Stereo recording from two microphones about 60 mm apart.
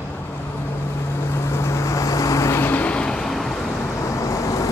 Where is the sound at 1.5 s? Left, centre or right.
Left.